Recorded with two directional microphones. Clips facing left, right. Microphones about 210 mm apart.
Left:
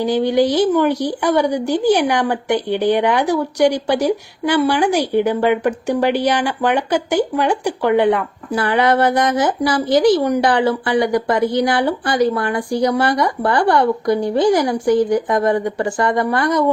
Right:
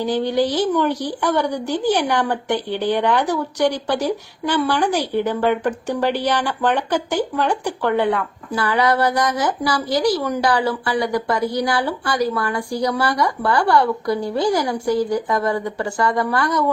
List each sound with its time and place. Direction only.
0.0 s speech: 15° left (ahead or behind)